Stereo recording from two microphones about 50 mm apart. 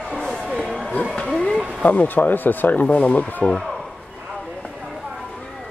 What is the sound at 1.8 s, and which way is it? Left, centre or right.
Speech, left.